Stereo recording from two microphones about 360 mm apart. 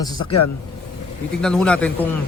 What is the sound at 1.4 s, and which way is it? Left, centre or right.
Speech, centre.